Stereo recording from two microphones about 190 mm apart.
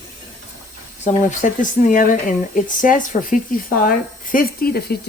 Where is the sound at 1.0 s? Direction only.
40° left (ahead or behind).